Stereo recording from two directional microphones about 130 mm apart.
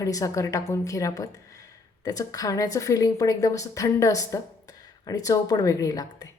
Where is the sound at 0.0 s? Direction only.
25° left (ahead or behind).